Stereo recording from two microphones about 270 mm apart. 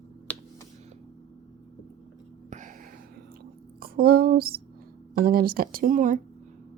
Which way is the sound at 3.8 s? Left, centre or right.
Right.